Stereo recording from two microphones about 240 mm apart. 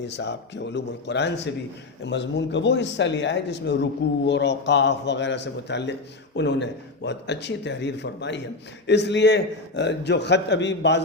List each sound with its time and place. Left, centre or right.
0.0 s speech: left